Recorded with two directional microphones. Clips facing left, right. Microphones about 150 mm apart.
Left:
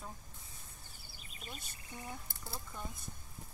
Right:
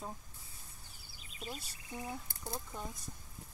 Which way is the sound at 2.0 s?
15° right (ahead or behind).